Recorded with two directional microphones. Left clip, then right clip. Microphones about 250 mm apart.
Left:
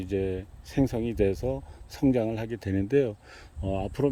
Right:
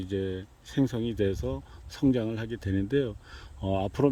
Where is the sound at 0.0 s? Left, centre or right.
Centre.